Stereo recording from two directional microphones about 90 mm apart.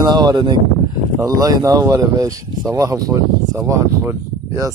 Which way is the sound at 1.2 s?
40° right (ahead or behind).